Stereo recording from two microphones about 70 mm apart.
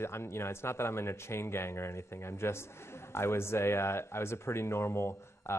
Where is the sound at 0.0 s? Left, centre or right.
Left.